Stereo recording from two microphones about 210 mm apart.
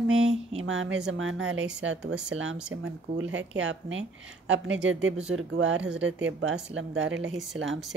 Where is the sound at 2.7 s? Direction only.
70° right (ahead or behind).